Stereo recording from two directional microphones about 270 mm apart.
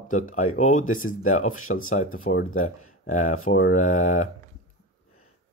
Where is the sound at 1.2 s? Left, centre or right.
Left.